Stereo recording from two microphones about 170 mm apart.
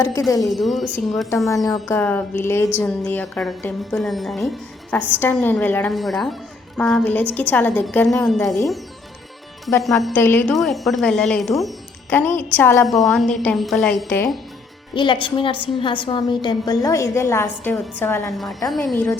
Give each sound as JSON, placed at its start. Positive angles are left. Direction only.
{"t": 0.4, "sound": "a woman's voice", "side_deg": 0}
{"t": 1.5, "sound": "a woman's voice", "side_deg": 20}
{"t": 10.0, "sound": "a woman's voice", "side_deg": 10}
{"t": 10.5, "sound": "a woman's voice", "side_deg": 0}
{"t": 12.1, "sound": "a woman's voice", "side_deg": 10}
{"t": 12.9, "sound": "a woman's voice", "side_deg": 0}
{"t": 14.9, "sound": "a woman's voice", "side_deg": 30}